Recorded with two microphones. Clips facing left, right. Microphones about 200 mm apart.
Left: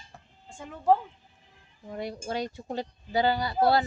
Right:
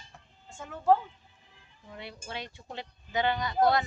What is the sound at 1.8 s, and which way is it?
Speech, 40° left (ahead or behind).